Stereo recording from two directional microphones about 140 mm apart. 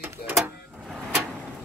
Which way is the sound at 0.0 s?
15° right (ahead or behind).